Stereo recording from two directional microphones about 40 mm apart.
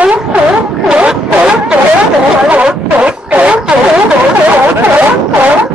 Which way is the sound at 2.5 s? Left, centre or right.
Right.